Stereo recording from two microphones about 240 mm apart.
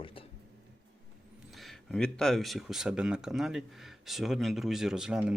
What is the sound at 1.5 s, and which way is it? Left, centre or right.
Speech, centre.